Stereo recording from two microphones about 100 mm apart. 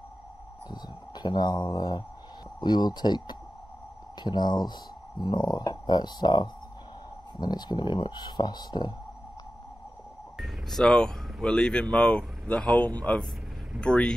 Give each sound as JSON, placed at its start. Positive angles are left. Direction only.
{"t": 0.7, "sound": "a sound", "side_deg": 45}
{"t": 2.6, "sound": "speech", "side_deg": 45}
{"t": 10.3, "sound": "speech", "side_deg": 0}